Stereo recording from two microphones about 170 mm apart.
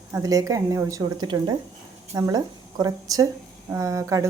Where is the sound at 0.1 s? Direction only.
20° right (ahead or behind).